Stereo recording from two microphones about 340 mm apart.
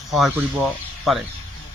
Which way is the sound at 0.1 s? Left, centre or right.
Centre.